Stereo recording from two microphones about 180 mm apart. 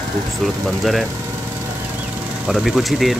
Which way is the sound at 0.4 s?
Centre (ahead or behind).